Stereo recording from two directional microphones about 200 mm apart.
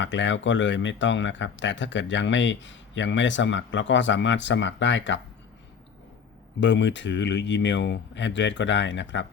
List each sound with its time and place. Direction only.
0.0 s speech: 65° left (ahead or behind)
6.6 s speech: 65° left (ahead or behind)